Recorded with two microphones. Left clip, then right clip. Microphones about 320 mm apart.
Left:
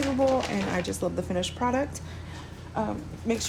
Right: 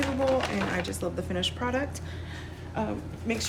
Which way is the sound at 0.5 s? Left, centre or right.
Centre.